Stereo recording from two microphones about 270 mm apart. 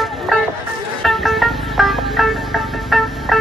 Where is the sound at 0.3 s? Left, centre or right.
Centre.